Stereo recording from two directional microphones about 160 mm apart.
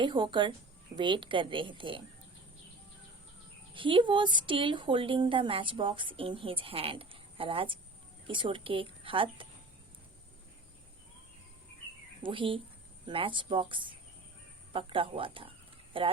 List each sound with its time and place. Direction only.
0.0 s a woman's voice: 30° right (ahead or behind)
3.8 s a woman's voice: 30° right (ahead or behind)
12.2 s a woman's voice: 30° right (ahead or behind)